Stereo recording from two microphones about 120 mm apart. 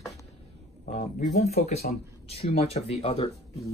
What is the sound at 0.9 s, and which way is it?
Speech, 75° left (ahead or behind).